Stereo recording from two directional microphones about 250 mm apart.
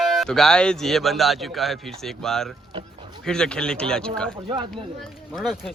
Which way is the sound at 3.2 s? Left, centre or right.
Centre.